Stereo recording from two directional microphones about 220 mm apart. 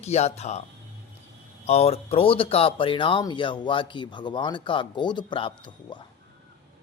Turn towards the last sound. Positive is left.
turn(degrees=20)  # may be behind; listen again after turning